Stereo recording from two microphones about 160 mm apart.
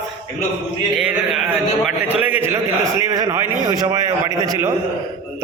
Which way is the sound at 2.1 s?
10° right (ahead or behind).